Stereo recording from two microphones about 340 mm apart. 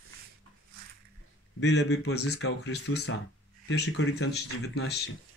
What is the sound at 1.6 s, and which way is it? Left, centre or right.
Speech, left.